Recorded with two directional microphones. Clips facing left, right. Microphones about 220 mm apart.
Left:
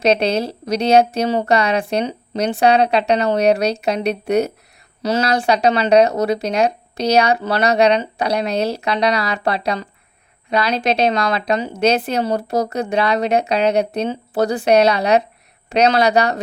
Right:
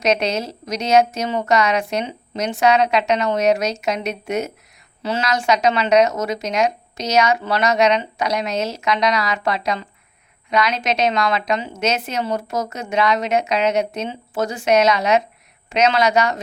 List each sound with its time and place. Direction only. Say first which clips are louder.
0.0 s speech: left 3 dB; 30° left (ahead or behind)